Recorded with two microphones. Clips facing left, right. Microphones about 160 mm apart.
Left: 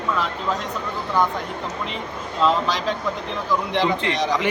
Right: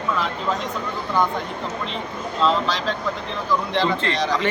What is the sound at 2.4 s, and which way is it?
Speech, 10° left (ahead or behind).